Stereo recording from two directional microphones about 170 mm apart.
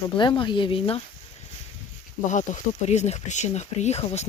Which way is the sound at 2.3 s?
45° left (ahead or behind).